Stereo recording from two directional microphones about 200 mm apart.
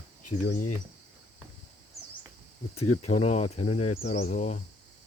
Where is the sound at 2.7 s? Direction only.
35° left (ahead or behind).